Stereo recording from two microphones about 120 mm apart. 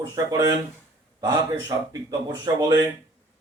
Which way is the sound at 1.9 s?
30° right (ahead or behind).